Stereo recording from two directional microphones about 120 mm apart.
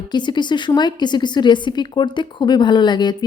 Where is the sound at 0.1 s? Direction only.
40° left (ahead or behind).